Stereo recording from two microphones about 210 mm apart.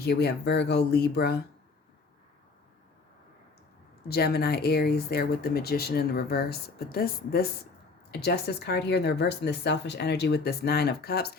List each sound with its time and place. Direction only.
0.0 s speech: 50° left (ahead or behind)
4.1 s speech: 50° left (ahead or behind)